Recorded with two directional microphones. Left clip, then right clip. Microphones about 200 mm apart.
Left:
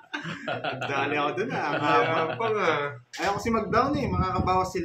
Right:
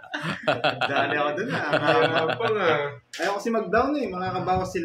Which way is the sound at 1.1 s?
40° left (ahead or behind).